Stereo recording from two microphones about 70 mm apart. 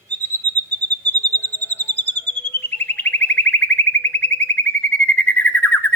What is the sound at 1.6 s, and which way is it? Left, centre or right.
Bird, left.